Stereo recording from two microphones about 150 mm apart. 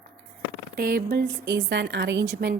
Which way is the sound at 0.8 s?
85° right.